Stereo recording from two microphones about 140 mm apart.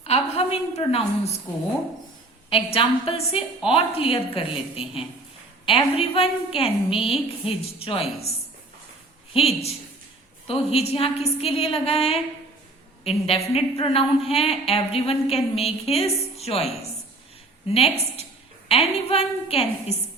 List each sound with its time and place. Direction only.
0.0 s a sound: 45° left (ahead or behind)
2.5 s a woman's voice: 40° left (ahead or behind)
9.3 s a woman's voice: 45° left (ahead or behind)
17.7 s a woman's voice: 45° left (ahead or behind)